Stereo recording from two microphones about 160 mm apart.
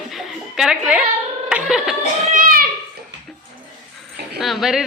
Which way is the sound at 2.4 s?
60° right (ahead or behind).